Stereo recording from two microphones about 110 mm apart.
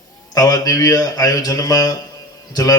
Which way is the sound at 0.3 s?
35° left (ahead or behind).